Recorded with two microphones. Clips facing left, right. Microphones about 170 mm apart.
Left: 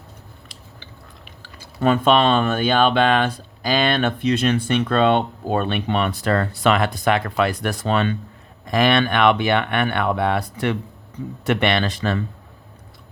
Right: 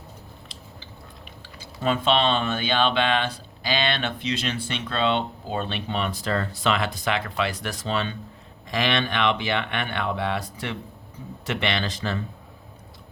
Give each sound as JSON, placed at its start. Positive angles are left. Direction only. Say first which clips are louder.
{"t": 1.5, "sound": "speech", "louder": "left 6 dB", "side_deg": 55}